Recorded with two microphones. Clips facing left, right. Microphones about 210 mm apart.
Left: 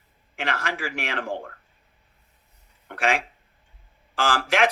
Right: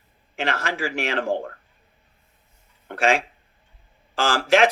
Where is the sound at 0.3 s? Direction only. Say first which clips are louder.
Right 3 dB; 25° right (ahead or behind).